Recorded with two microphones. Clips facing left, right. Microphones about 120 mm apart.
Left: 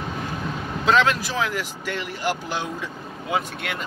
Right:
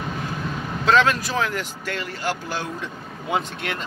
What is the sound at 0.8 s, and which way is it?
Speech, 10° left (ahead or behind).